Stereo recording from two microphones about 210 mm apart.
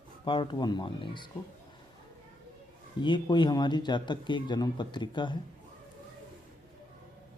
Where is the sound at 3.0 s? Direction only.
20° left (ahead or behind).